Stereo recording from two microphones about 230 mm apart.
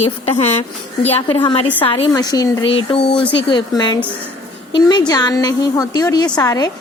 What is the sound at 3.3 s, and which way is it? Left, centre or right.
A woman's voice, left.